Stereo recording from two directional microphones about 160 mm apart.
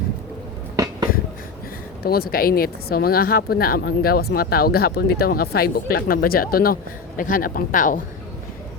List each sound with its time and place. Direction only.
2.0 s speech: 70° left (ahead or behind)